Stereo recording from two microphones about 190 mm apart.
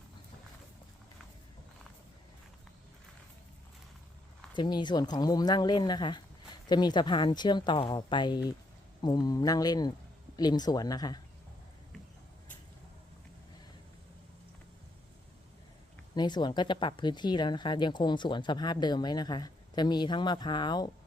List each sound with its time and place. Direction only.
4.5 s speech: 25° left (ahead or behind)
16.1 s speech: 20° left (ahead or behind)